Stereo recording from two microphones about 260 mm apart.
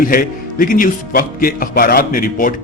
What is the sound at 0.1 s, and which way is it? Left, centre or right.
Speech, left.